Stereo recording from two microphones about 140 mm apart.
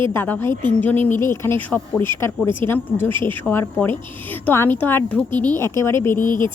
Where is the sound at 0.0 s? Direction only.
15° left (ahead or behind).